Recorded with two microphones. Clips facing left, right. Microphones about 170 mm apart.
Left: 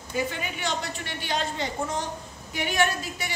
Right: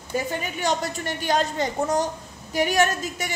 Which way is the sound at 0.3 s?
45° right (ahead or behind).